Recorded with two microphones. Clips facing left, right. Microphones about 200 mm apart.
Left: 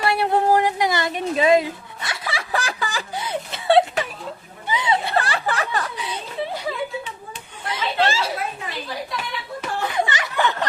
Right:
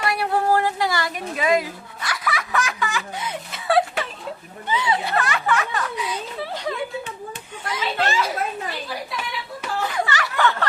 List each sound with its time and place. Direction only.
0.0 s a woman's voice: 25° left (ahead or behind)
5.1 s speech: 30° left (ahead or behind)
7.7 s chatter: 30° left (ahead or behind)
9.9 s a sound: 20° left (ahead or behind)